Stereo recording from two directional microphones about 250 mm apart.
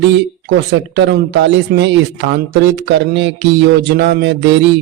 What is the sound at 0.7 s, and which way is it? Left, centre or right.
Speech, right.